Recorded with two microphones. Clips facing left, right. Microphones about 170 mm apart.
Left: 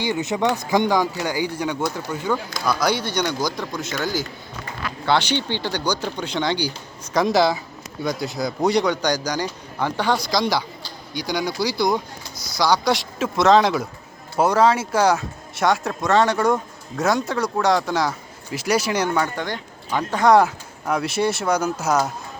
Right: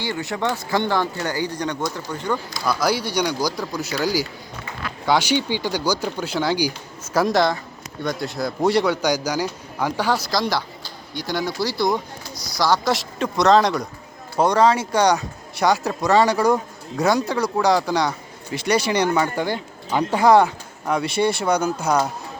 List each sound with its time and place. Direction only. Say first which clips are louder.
0.0 s speech: left 3 dB; 20° left (ahead or behind); by 22.1 s 5° left (ahead or behind)